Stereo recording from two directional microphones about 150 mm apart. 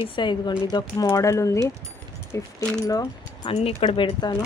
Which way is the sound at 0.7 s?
20° left (ahead or behind).